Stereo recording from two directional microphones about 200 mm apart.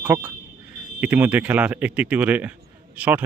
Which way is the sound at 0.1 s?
10° right (ahead or behind).